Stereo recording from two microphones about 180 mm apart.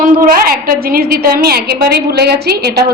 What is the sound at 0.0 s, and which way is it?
A woman's voice, 50° right (ahead or behind).